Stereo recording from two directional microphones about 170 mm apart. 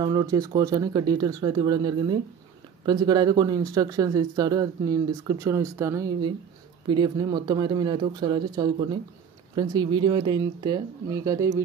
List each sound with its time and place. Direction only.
0.0 s speech: 20° right (ahead or behind)